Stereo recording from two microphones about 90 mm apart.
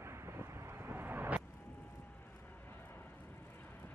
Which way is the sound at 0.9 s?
25° right (ahead or behind).